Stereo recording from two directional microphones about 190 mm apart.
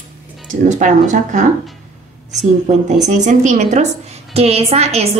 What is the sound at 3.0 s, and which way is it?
A woman's voice, 40° right (ahead or behind).